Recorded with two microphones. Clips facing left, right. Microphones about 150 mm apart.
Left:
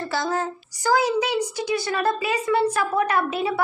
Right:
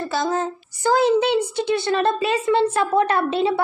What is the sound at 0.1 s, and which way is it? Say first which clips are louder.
A woman's voice: right 2 dB; 20° right (ahead or behind).